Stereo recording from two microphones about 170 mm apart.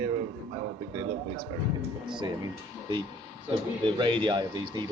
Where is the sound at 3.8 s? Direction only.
30° right (ahead or behind).